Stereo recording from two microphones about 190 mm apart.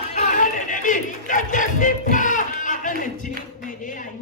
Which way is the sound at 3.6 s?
45° left (ahead or behind).